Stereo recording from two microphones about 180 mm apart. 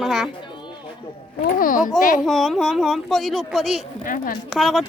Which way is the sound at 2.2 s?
Centre (ahead or behind).